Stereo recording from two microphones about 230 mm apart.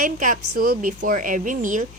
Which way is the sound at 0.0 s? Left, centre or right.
Right.